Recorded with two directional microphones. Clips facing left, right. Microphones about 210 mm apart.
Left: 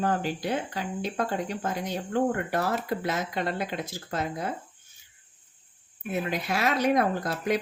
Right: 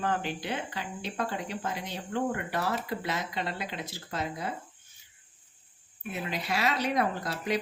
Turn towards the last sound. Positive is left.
turn(degrees=45)  # may be behind; listen again after turning